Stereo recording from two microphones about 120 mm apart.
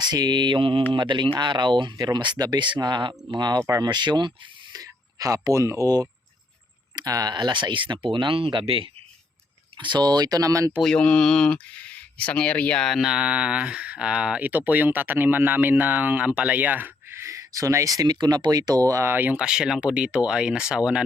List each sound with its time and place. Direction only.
0.0 s speech: 35° right (ahead or behind)
4.7 s a sound: 30° right (ahead or behind)
6.9 s speech: 30° right (ahead or behind)
10.8 s speech: 5° left (ahead or behind)